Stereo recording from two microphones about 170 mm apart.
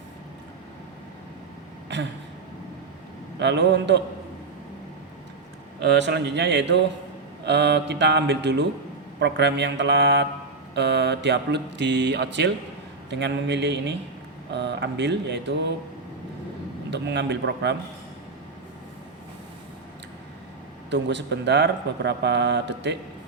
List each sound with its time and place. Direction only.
1.9 s a sound: 90° right
3.3 s speech: 90° right
5.8 s speech: 90° right
16.9 s speech: 90° right
20.9 s speech: 90° right